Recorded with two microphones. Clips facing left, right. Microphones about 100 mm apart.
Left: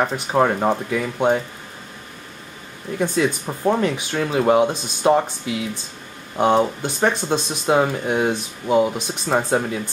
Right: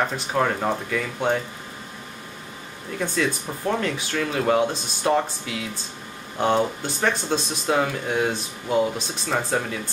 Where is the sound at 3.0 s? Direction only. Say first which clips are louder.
Left 4 dB; 20° left (ahead or behind).